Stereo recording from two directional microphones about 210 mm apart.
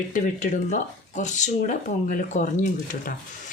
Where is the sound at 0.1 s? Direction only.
35° left (ahead or behind).